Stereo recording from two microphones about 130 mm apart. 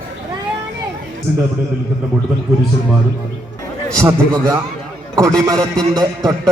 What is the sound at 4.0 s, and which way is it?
A man's voice, 20° right (ahead or behind).